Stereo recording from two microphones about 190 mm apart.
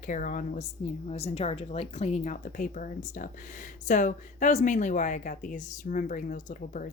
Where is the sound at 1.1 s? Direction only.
30° left (ahead or behind).